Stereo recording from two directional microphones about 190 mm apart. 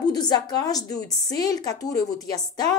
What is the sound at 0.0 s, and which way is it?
A woman's voice, 20° left (ahead or behind).